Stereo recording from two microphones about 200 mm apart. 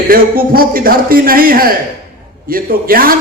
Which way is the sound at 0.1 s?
45° right (ahead or behind).